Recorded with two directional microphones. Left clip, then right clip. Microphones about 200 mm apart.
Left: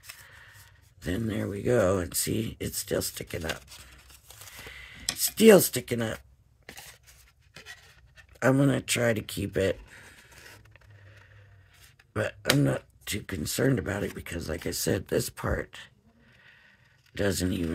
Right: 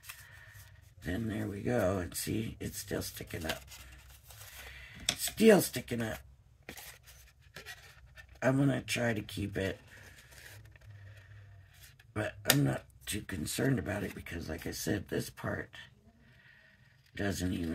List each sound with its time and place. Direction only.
1.0 s speech: 50° left (ahead or behind)
5.4 s speech: 50° left (ahead or behind)
6.6 s a sound: 10° left (ahead or behind)
7.5 s rub: 5° right (ahead or behind)
8.4 s speech: 50° left (ahead or behind)
12.1 s speech: 50° left (ahead or behind)
17.1 s speech: 50° left (ahead or behind)